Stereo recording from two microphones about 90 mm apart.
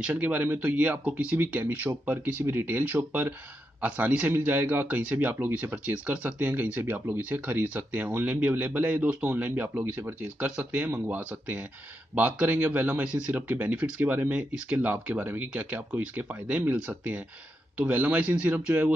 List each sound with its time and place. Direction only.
0.0 s a man's voice: 15° right (ahead or behind)